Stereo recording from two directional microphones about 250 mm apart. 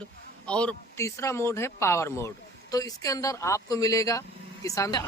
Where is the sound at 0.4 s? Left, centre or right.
Centre.